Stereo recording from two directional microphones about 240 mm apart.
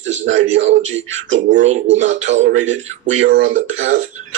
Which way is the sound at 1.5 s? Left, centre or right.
Right.